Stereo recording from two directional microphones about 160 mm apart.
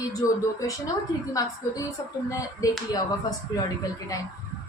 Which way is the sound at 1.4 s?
20° left (ahead or behind).